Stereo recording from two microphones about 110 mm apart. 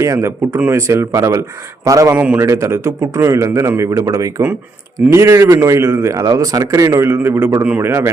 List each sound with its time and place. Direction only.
0.0 s speech: 25° right (ahead or behind)
2.1 s a man's voice: 15° right (ahead or behind)
2.4 s speech: 25° right (ahead or behind)